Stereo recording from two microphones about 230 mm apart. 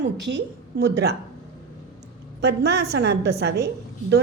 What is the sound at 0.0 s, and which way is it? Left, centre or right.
Speech, right.